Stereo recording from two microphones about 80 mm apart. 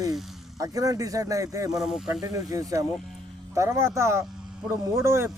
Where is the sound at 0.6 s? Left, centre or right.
Right.